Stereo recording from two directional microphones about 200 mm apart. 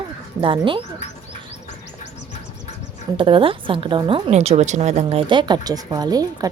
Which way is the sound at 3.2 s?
25° right (ahead or behind).